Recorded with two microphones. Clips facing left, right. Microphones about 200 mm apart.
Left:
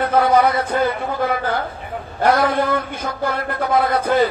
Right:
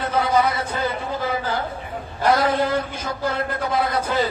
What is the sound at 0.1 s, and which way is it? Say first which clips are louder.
A man's voice: left 4 dB; 55° left (ahead or behind).